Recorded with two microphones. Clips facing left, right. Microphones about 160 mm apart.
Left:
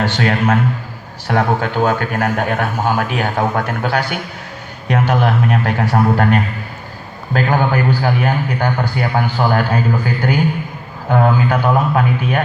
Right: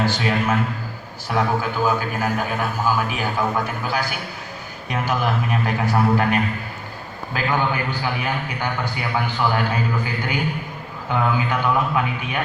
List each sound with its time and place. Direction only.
0.0 s a man's voice: 70° left (ahead or behind); by 12.4 s 50° left (ahead or behind)